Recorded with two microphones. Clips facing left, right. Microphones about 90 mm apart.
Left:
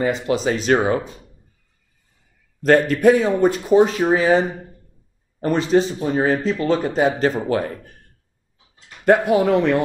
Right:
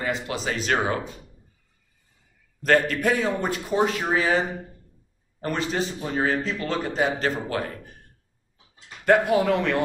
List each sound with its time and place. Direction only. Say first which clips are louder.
0.0 s speech: left 8 dB; 25° left (ahead or behind)
2.6 s speech: left 7 dB; 25° left (ahead or behind)
5.4 s speech: left 9 dB; 25° left (ahead or behind)
9.0 s speech: left 4 dB; 25° left (ahead or behind)